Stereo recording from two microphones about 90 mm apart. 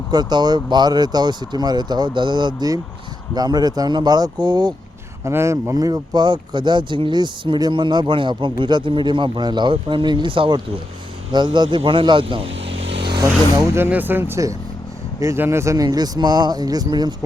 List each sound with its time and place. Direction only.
0.1 s speech: 50° right (ahead or behind)
5.2 s speech: 30° right (ahead or behind)
5.7 s speech: 45° right (ahead or behind); by 10.6 s 70° right (ahead or behind)
11.3 s speech: 55° right (ahead or behind); by 13.1 s 85° right
13.7 s speech: 20° right (ahead or behind); by 17.2 s 50° right (ahead or behind)